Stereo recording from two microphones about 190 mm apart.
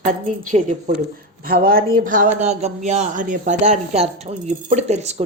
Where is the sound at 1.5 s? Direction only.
50° right (ahead or behind); by 5.2 s 35° right (ahead or behind).